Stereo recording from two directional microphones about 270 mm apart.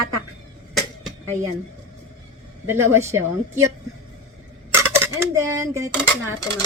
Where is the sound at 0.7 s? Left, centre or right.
Centre.